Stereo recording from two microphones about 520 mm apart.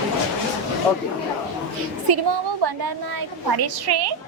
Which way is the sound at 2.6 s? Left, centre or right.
Right.